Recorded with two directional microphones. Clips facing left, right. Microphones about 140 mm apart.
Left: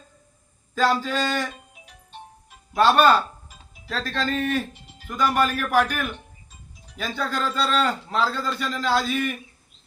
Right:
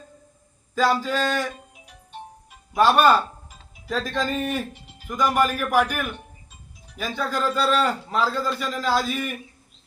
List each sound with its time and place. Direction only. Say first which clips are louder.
0.8 s a man's voice: right 1 dB; 10° right (ahead or behind)
2.7 s a man's voice: even; 10° right (ahead or behind)